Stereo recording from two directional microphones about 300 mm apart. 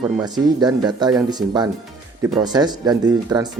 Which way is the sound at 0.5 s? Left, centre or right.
Centre.